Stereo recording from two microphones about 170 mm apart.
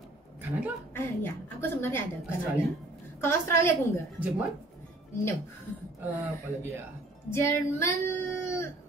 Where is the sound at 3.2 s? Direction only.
15° left (ahead or behind).